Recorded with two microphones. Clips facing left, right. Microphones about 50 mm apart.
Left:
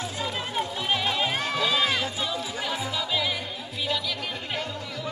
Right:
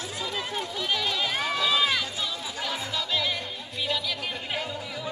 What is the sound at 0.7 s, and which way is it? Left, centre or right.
Run, left.